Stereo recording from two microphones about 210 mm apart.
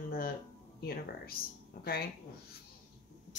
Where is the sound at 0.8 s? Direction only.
45° left (ahead or behind).